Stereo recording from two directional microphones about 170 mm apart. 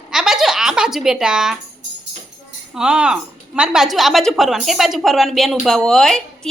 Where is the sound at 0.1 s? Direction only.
5° right (ahead or behind).